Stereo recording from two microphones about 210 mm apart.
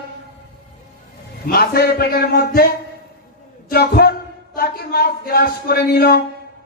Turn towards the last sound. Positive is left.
turn(degrees=50)  # may be behind; listen again after turning